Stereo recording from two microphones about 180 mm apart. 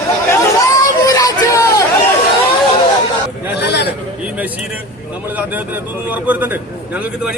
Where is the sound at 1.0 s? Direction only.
20° left (ahead or behind).